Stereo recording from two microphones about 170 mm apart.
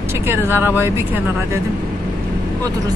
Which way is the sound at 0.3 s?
15° right (ahead or behind).